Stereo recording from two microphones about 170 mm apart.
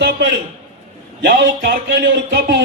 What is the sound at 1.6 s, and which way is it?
Speech, 60° right (ahead or behind).